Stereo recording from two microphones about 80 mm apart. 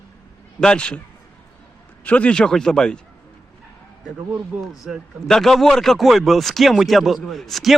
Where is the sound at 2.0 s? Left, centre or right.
Centre.